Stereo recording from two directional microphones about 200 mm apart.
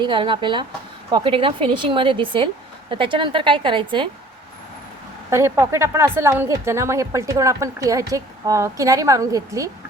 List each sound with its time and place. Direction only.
0.0 s a woman's voice: 25° right (ahead or behind)
5.3 s a woman's voice: 15° right (ahead or behind)